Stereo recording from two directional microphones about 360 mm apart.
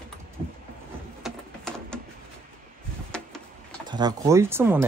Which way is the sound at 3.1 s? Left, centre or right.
Centre.